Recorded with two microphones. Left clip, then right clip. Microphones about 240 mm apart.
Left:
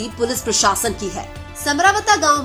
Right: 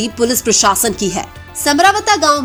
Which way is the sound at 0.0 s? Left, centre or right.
Right.